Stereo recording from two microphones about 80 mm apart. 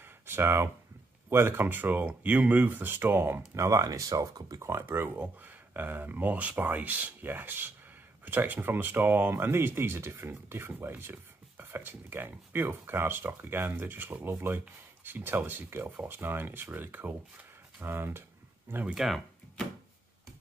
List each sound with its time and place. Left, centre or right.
0.3 s speech: right
4.6 s speech: right
18.9 s speech: centre